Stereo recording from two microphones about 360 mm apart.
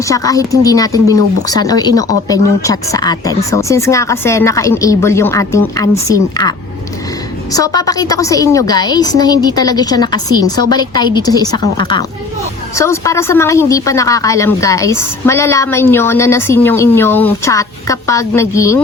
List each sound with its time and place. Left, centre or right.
0.1 s a woman's voice: centre
7.5 s a woman's voice: centre